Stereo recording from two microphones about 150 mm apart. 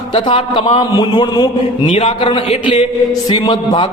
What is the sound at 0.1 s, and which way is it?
A man's voice, 35° left (ahead or behind).